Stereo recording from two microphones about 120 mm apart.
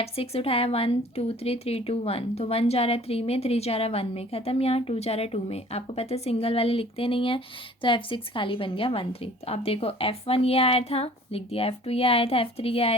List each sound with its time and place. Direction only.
0.0 s a woman's voice: 55° left (ahead or behind)